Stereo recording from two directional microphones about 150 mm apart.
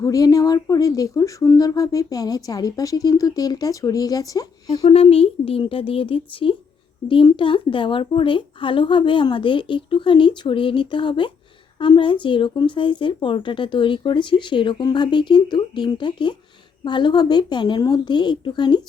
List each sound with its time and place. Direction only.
0.0 s speech: 25° left (ahead or behind)
4.7 s speech: 45° left (ahead or behind)